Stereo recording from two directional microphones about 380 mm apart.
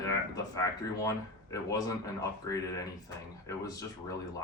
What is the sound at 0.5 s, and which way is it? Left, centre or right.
Speech, centre.